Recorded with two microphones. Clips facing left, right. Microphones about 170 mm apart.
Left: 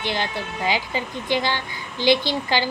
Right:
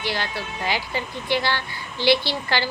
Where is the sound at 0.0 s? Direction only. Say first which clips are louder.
Left 2 dB; 20° left (ahead or behind).